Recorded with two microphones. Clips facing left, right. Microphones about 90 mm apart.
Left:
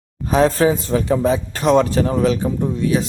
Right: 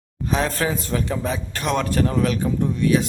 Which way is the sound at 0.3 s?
30° left (ahead or behind).